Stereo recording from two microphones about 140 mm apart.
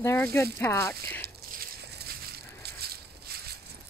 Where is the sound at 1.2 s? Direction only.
90° right.